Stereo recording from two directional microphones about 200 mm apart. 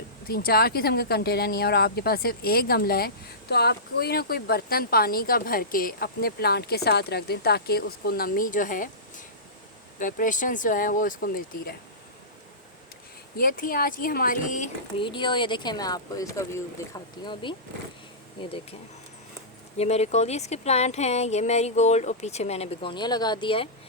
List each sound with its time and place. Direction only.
0.3 s speech: 50° left (ahead or behind)
13.3 s speech: 45° left (ahead or behind)
14.9 s speech: 25° left (ahead or behind)
19.7 s speech: 30° left (ahead or behind)